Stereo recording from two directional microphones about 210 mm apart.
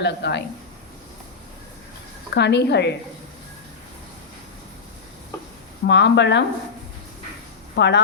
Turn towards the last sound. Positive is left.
turn(degrees=55)  # may be behind; listen again after turning